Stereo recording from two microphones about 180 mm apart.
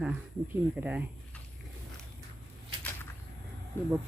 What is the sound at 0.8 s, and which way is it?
Speech, 10° right (ahead or behind).